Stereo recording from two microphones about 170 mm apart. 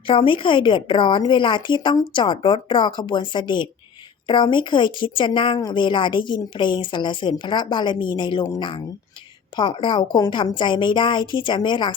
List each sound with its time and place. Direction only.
0.1 s a woman's voice: 30° left (ahead or behind)